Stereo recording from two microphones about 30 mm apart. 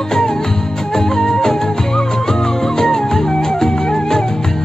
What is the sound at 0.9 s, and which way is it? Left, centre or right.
Music, centre.